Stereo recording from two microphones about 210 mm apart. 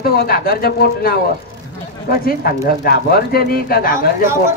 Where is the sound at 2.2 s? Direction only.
45° left (ahead or behind).